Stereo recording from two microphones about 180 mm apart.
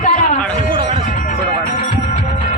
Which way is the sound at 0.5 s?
30° right (ahead or behind).